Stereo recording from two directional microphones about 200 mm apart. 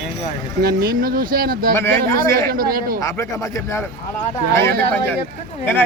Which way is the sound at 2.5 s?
45° right (ahead or behind).